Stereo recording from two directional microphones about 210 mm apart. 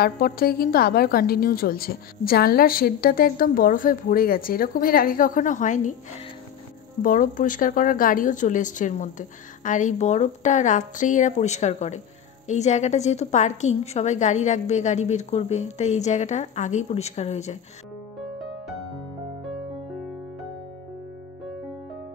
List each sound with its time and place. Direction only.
0.0 s a woman's voice: 45° left (ahead or behind)
7.0 s a woman's voice: 40° left (ahead or behind)